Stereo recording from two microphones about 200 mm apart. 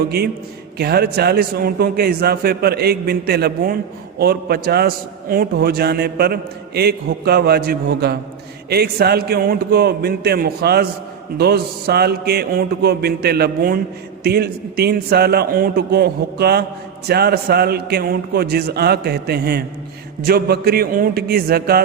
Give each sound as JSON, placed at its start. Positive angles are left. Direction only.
{"t": 0.8, "sound": "a man's voice", "side_deg": -50}